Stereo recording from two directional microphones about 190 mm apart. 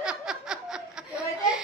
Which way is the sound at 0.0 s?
5° right (ahead or behind).